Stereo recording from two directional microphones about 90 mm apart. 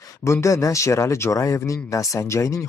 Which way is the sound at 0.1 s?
30° left (ahead or behind).